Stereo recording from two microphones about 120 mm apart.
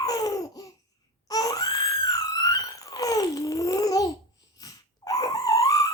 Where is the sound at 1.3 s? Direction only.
30° left (ahead or behind).